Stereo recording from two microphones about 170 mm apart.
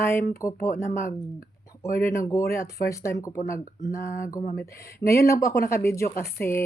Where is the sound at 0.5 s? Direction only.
50° left (ahead or behind).